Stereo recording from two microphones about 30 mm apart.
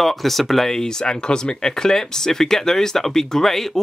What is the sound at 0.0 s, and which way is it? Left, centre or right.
Speech, centre.